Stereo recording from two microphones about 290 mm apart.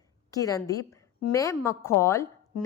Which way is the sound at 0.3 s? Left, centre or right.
Centre.